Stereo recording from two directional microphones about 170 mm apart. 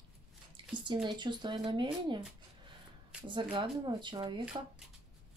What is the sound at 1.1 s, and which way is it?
Speech, 25° right (ahead or behind).